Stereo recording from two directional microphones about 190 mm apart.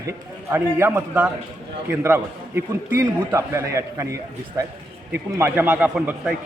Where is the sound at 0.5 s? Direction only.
15° right (ahead or behind).